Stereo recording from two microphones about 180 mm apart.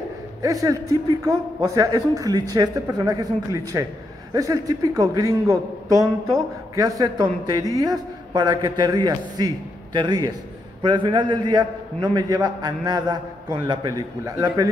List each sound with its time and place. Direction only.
0.4 s a man's voice: 20° right (ahead or behind)